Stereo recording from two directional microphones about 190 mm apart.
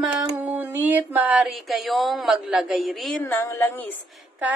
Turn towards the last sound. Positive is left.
turn(degrees=-10)  # may be behind; listen again after turning